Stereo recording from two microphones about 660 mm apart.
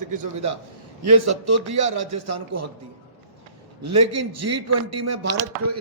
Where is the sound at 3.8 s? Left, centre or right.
Right.